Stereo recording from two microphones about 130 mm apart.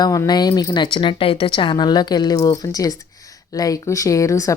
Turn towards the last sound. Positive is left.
turn(degrees=25)  # may be behind; listen again after turning